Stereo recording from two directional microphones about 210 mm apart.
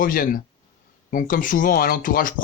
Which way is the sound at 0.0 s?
40° left (ahead or behind).